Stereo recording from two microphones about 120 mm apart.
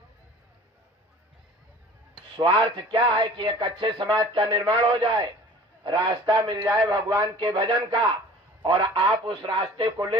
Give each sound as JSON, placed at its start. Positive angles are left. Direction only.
{"t": 2.3, "sound": "a man's voice", "side_deg": -45}